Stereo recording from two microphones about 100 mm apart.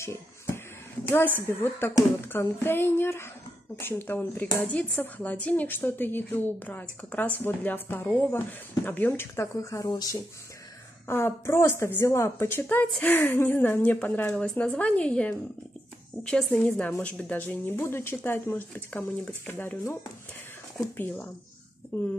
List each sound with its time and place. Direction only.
0.0 s a sound: 25° left (ahead or behind)
1.0 s a woman's voice: 20° left (ahead or behind); by 10.1 s 40° left (ahead or behind)
11.1 s a woman's voice: 25° left (ahead or behind)